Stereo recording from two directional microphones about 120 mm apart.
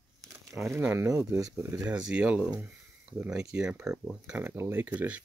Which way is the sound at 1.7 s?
10° right (ahead or behind).